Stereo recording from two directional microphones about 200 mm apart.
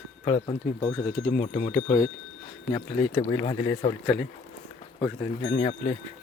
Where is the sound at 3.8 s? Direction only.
30° left (ahead or behind).